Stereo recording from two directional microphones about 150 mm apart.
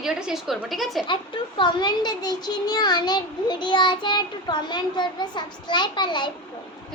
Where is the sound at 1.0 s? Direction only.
30° left (ahead or behind).